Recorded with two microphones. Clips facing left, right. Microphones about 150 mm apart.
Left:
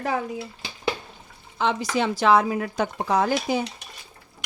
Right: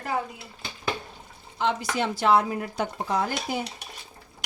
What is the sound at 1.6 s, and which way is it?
Speech, 90° left.